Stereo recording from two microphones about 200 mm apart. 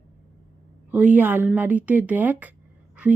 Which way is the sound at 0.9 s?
10° right (ahead or behind).